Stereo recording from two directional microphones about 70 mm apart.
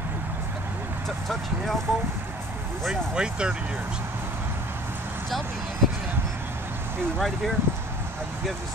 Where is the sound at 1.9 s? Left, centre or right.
Centre.